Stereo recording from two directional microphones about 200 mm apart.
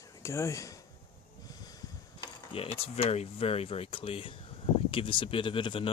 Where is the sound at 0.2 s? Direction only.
15° left (ahead or behind).